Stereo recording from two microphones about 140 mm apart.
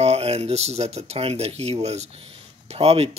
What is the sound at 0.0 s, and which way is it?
Speech, 50° right (ahead or behind).